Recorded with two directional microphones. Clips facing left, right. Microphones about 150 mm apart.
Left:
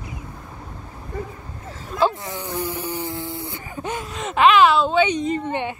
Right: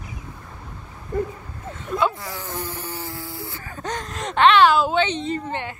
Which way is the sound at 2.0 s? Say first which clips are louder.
Left 4 dB; 20° left (ahead or behind).